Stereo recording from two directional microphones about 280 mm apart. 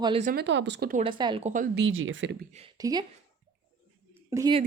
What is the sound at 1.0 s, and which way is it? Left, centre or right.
Speech, centre.